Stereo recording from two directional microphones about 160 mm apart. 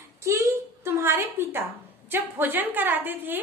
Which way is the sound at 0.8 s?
15° right (ahead or behind).